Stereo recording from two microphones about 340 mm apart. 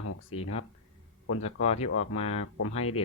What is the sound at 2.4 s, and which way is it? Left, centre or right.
Speech, left.